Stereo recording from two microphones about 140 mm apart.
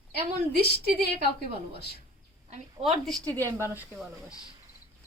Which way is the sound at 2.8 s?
50° right (ahead or behind).